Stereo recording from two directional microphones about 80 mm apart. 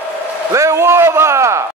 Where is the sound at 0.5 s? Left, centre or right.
Right.